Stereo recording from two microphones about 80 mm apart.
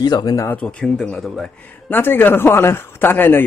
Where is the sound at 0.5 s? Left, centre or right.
Centre.